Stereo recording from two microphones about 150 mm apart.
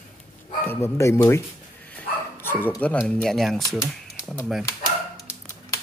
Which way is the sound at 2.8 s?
10° left (ahead or behind).